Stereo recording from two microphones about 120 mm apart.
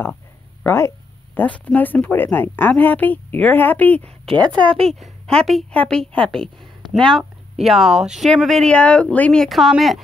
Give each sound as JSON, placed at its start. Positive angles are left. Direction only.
{"t": 0.7, "sound": "speech", "side_deg": 20}
{"t": 4.4, "sound": "speech", "side_deg": -40}
{"t": 5.0, "sound": "a woman's voice", "side_deg": 5}